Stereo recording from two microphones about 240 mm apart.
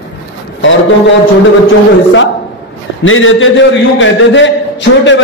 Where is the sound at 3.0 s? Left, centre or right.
Left.